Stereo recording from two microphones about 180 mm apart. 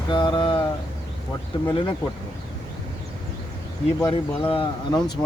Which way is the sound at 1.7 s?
25° left (ahead or behind).